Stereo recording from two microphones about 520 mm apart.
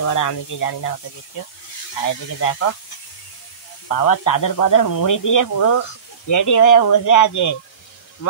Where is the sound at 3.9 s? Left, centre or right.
Left.